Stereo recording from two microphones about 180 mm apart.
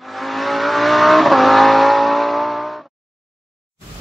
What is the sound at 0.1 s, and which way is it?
Vehicle, centre (ahead or behind).